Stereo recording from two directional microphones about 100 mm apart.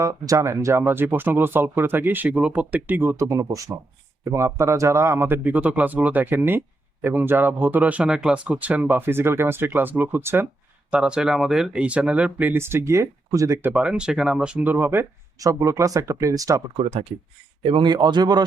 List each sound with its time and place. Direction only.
0.0 s speech: 35° right (ahead or behind)
10.9 s speech: 10° right (ahead or behind); by 13.7 s 35° right (ahead or behind)
13.7 s speech: 10° right (ahead or behind)
15.4 s speech: 35° right (ahead or behind)
16.7 s speech: 75° right (ahead or behind)
17.6 s speech: 60° right (ahead or behind); by 18.4 s 45° right (ahead or behind)